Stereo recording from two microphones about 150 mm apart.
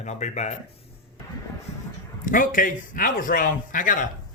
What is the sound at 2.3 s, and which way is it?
A man's voice, 65° left (ahead or behind).